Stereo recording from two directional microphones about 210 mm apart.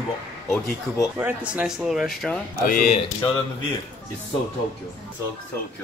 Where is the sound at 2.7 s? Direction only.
40° left (ahead or behind).